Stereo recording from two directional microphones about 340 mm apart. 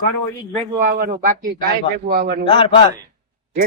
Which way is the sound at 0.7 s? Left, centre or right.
Right.